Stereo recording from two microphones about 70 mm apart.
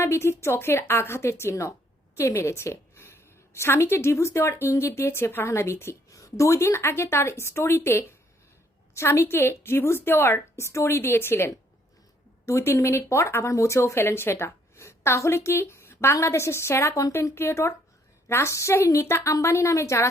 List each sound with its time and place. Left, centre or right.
0.0 s a woman's voice: left
6.1 s speech: left
10.5 s speech: left